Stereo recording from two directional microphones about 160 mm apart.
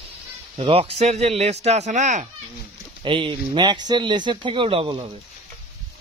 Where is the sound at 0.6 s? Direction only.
35° right (ahead or behind).